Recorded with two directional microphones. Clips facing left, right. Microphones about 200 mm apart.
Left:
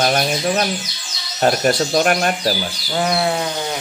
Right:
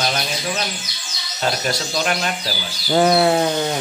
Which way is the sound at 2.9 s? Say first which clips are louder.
Right 5 dB; 35° right (ahead or behind).